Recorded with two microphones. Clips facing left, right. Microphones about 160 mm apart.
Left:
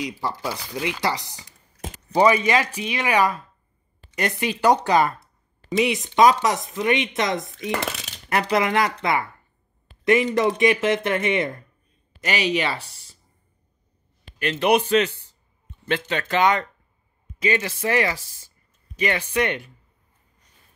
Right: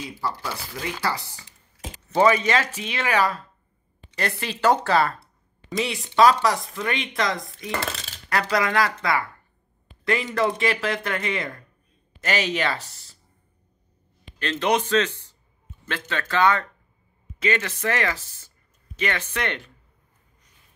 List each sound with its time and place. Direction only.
0.0 s speech: 15° left (ahead or behind)
12.3 s speech: 10° left (ahead or behind)
12.7 s speech: 40° right (ahead or behind)
14.4 s speech: 15° left (ahead or behind)